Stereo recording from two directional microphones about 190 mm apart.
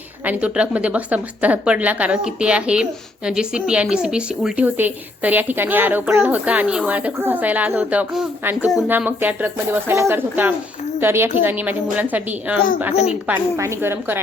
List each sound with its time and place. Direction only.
0.3 s a woman's voice: 5° right (ahead or behind)
12.9 s a woman's voice: 35° left (ahead or behind)
13.2 s a woman's voice: 10° right (ahead or behind)